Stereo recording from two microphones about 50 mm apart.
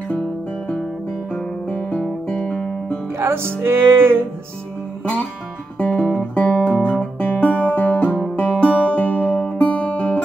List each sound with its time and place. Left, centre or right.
1.7 s guitar: left
3.2 s music: right
5.8 s music: left